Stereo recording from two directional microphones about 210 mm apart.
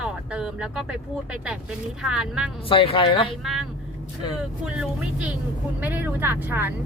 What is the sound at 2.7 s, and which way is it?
Speech, 25° left (ahead or behind).